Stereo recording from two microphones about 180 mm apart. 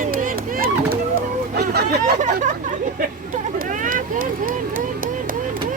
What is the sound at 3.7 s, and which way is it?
Vehicle, 45° right (ahead or behind).